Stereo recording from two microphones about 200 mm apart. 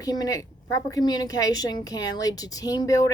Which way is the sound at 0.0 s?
20° left (ahead or behind).